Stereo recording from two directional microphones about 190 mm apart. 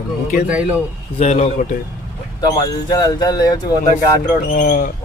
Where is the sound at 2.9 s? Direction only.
20° left (ahead or behind).